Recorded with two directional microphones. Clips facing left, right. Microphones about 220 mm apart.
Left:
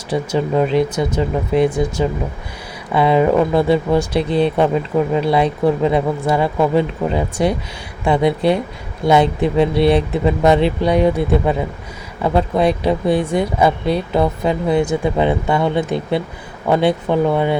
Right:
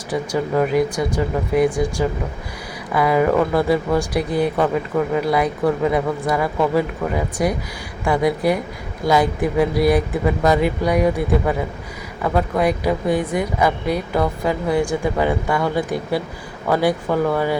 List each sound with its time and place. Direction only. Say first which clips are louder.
0.1 s speech: left 3 dB; 25° left (ahead or behind)